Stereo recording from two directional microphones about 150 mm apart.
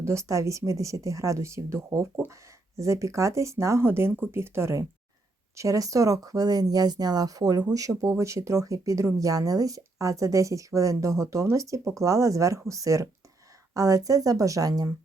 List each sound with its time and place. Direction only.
0.0 s speech: 20° right (ahead or behind)